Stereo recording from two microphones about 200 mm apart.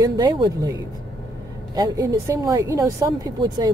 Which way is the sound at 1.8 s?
15° right (ahead or behind).